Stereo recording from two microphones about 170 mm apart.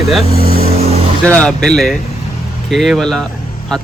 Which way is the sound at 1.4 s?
5° left (ahead or behind).